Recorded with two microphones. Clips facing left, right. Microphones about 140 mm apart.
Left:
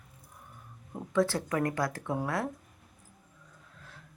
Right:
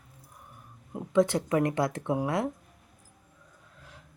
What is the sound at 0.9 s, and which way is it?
Speech, 20° right (ahead or behind).